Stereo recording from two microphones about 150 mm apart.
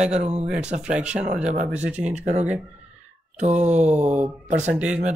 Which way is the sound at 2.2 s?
50° right (ahead or behind).